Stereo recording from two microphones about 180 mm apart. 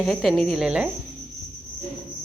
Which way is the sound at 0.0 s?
Centre (ahead or behind).